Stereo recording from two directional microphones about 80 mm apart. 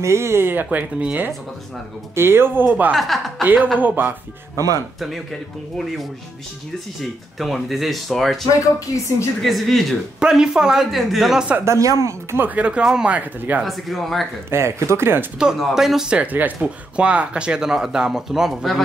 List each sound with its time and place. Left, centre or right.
0.0 s speech: right
2.9 s speech: centre
3.8 s speech: right
4.6 s speech: right
7.0 s speech: centre
11.6 s speech: right
12.4 s speech: centre
13.6 s speech: centre
14.5 s speech: right
15.3 s speech: centre